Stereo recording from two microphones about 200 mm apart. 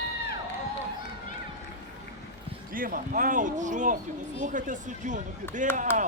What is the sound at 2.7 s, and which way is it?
Speech, 45° right (ahead or behind).